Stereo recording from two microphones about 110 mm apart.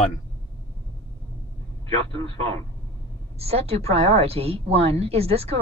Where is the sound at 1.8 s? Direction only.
65° right (ahead or behind).